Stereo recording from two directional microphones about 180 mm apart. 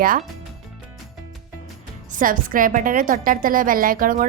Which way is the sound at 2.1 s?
50° right (ahead or behind).